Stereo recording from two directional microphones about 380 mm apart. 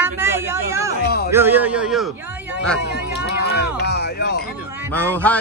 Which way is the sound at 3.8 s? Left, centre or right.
Left.